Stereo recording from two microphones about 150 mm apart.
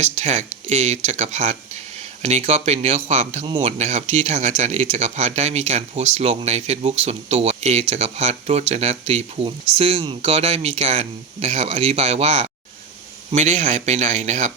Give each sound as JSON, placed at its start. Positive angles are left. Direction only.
{"t": 0.0, "sound": "speech", "side_deg": -50}